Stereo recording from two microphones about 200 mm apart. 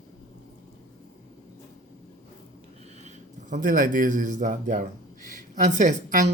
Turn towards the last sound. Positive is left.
turn(degrees=-40)  # may be behind; listen again after turning